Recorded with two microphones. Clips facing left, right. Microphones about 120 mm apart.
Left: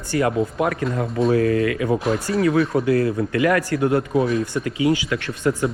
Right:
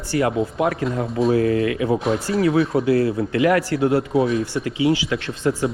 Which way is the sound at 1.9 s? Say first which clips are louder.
Even; centre (ahead or behind).